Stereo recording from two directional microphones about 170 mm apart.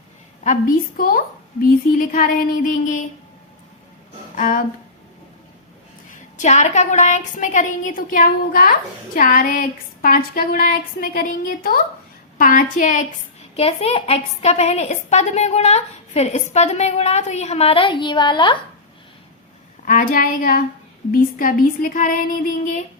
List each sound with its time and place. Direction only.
0.9 s a sound: 55° left (ahead or behind)
2.0 s a woman's voice: 55° left (ahead or behind)
4.4 s speech: 50° left (ahead or behind)
6.1 s a woman's voice: 45° left (ahead or behind)
9.1 s a sound: 55° left (ahead or behind)
12.7 s a woman's voice: 50° left (ahead or behind)
13.6 s a woman's voice: 35° left (ahead or behind)
19.8 s a sound: 50° left (ahead or behind)
21.1 s a woman's voice: 55° left (ahead or behind)